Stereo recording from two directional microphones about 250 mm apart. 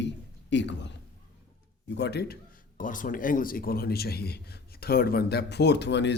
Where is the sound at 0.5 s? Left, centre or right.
Left.